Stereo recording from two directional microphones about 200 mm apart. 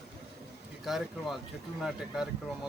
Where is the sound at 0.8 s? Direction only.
Centre (ahead or behind).